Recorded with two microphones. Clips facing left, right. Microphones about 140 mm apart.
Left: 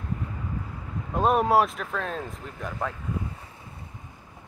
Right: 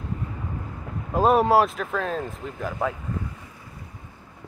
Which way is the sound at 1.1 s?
Centre (ahead or behind).